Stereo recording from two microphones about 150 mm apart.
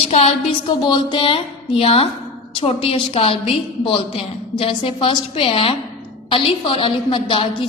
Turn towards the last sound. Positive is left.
turn(degrees=35)  # may be behind; listen again after turning